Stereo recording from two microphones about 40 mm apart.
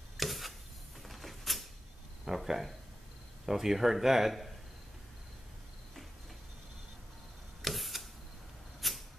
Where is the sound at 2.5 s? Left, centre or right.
Centre.